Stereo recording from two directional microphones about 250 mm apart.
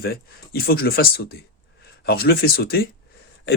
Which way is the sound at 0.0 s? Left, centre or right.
Left.